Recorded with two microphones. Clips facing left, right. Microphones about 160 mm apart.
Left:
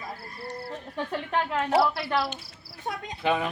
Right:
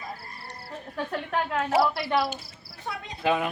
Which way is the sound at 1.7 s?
5° right (ahead or behind).